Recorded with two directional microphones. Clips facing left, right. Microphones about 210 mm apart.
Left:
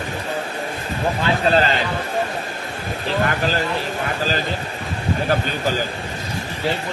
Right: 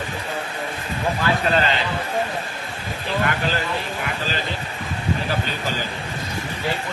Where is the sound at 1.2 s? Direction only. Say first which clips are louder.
Left 3 dB; 35° left (ahead or behind).